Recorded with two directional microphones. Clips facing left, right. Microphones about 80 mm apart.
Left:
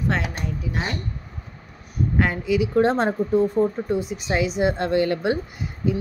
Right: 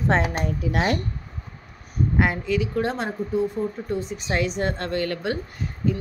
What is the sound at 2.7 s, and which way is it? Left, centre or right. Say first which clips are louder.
Speech: left 6 dB; left.